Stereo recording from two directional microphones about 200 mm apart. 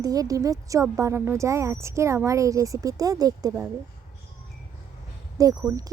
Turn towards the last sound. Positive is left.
turn(degrees=-15)  # may be behind; listen again after turning